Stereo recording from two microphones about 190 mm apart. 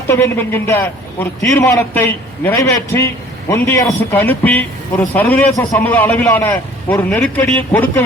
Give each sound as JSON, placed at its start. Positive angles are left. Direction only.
{"t": 0.1, "sound": "a man's voice", "side_deg": 10}
{"t": 3.5, "sound": "a man's voice", "side_deg": 15}